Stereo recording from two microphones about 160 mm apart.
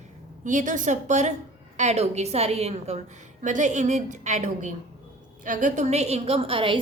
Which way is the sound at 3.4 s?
50° right (ahead or behind).